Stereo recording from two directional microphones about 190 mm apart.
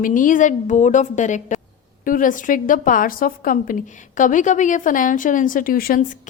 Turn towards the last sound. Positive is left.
turn(degrees=50)  # may be behind; listen again after turning